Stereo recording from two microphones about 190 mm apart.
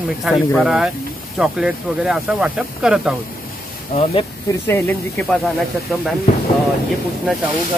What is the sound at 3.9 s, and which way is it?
Speech, 35° left (ahead or behind).